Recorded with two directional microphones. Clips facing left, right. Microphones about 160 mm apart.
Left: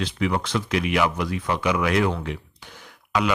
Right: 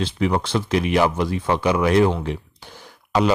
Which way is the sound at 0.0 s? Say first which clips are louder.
Right 3 dB; 35° right (ahead or behind).